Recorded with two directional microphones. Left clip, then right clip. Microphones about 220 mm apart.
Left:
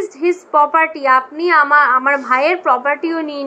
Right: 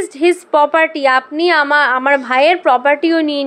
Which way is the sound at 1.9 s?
45° right (ahead or behind).